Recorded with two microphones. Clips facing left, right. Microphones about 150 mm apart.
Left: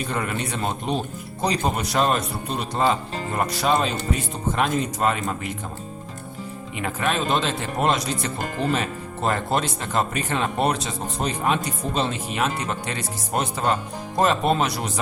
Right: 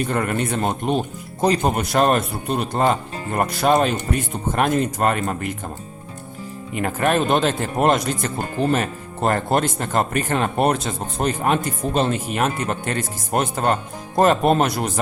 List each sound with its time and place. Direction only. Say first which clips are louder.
0.1 s speech: right 5 dB; 50° right (ahead or behind)
6.7 s speech: right 5 dB; 50° right (ahead or behind)